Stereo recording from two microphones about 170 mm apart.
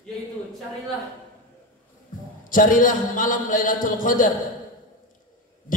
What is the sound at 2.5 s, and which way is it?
A man's voice, 50° left (ahead or behind).